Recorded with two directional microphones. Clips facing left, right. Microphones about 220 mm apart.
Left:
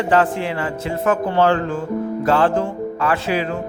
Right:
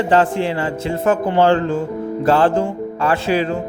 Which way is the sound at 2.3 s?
30° right (ahead or behind).